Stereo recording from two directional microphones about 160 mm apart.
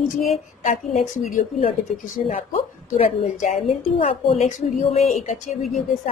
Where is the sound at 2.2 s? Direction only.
40° left (ahead or behind).